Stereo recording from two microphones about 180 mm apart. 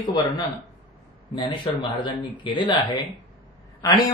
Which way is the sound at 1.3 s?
25° left (ahead or behind).